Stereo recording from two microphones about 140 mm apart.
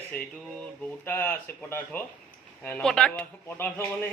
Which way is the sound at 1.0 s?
15° left (ahead or behind).